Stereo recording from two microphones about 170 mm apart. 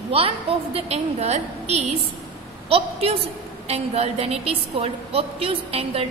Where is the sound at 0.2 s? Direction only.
35° right (ahead or behind).